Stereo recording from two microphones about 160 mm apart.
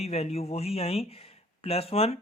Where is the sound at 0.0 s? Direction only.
40° left (ahead or behind).